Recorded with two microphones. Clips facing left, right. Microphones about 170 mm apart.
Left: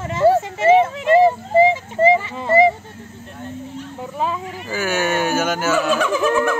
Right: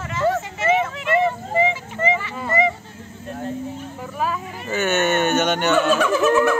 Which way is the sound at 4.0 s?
25° left (ahead or behind).